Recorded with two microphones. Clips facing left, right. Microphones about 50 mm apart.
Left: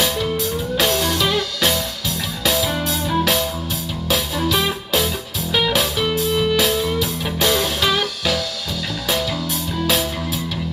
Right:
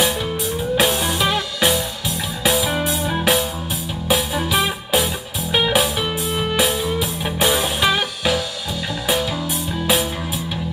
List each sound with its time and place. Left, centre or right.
0.7 s music: centre